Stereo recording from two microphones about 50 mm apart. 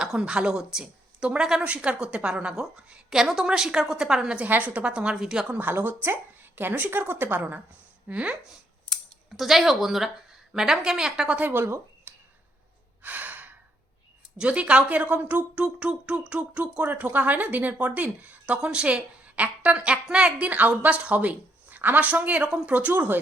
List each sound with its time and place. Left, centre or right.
0.1 s a woman's voice: centre
1.6 s a woman's voice: right
4.4 s speech: right
4.9 s a woman's voice: right
5.7 s a woman's voice: right
8.0 s speech: right
9.3 s a woman's voice: centre
11.3 s speech: right
11.5 s speech: right
12.1 s a sound: right
13.0 s gasp: right
14.3 s speech: right
15.5 s speech: right
16.9 s speech: right